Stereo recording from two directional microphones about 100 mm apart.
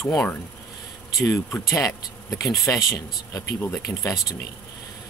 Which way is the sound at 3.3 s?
20° left (ahead or behind).